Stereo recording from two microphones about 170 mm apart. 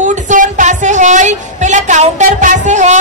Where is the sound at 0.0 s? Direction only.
45° right (ahead or behind).